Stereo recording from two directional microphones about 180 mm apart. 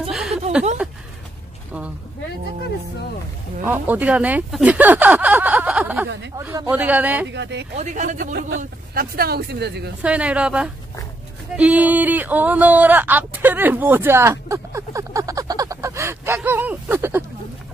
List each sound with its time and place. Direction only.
0.1 s a sound: centre (ahead or behind)
3.6 s speech: 10° right (ahead or behind)
6.3 s speech: 20° right (ahead or behind)
7.2 s speech: 75° right (ahead or behind)
7.7 s speech: 40° right (ahead or behind); by 9.8 s 65° right (ahead or behind)
10.0 s speech: 5° right (ahead or behind)
11.5 s a sound: 5° right (ahead or behind)